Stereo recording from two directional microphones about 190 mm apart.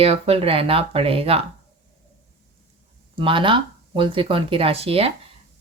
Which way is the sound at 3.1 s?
25° right (ahead or behind).